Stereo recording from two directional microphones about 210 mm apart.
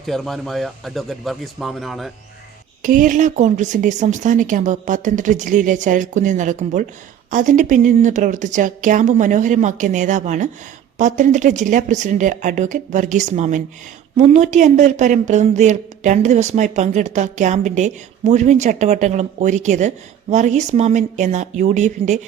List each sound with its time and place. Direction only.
0.0 s speech: centre (ahead or behind)
2.8 s a woman's voice: 40° right (ahead or behind)